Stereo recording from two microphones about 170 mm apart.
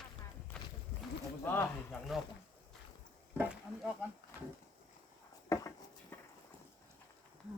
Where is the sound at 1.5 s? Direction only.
15° left (ahead or behind).